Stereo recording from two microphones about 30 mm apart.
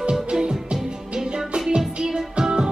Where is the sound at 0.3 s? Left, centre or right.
Right.